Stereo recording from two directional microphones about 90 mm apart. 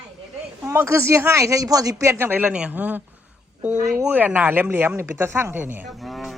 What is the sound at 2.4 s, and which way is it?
Speech, 15° right (ahead or behind).